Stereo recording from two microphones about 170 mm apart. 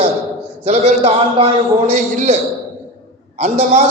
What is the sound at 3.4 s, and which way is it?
Speech, 45° right (ahead or behind).